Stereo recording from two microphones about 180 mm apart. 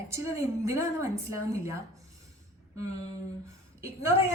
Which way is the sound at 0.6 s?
15° right (ahead or behind).